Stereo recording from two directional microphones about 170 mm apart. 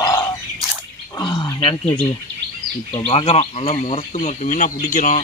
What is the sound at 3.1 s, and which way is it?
A man's voice, 35° left (ahead or behind).